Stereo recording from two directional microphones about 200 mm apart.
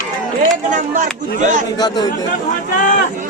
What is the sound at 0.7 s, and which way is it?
Speech, 40° right (ahead or behind).